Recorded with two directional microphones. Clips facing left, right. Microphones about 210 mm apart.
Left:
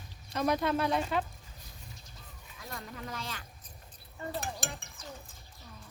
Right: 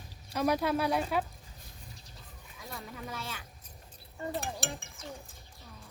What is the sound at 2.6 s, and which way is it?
Speech, 5° right (ahead or behind).